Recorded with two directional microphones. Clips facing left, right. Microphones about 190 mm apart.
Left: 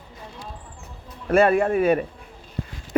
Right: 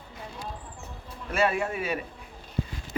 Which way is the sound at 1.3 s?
55° left (ahead or behind).